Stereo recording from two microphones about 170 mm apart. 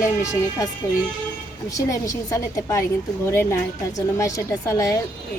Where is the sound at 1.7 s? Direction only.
20° left (ahead or behind).